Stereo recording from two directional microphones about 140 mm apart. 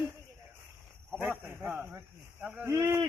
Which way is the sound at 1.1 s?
15° right (ahead or behind).